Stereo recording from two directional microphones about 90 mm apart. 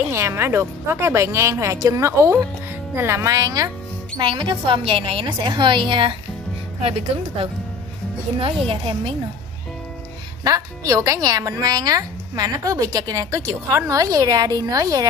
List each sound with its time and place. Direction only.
0.0 s a woman's voice: 30° right (ahead or behind)
3.3 s speech: 45° right (ahead or behind)
4.2 s a woman's voice: 65° right (ahead or behind)
5.5 s a woman's voice: 65° right (ahead or behind)
6.8 s a woman's voice: 90° right
10.4 s speech: 40° right (ahead or behind)